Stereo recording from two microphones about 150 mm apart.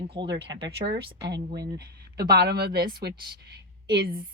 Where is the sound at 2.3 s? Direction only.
90° right.